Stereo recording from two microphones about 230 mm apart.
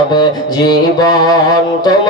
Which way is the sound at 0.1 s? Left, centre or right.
Centre.